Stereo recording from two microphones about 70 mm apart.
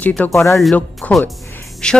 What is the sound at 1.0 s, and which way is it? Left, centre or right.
Speech, left.